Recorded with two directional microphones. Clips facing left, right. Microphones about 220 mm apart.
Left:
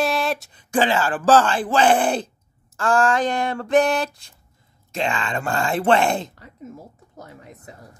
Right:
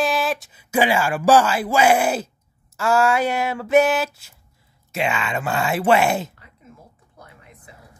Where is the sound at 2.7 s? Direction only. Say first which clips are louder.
Right 1 dB; 10° right (ahead or behind).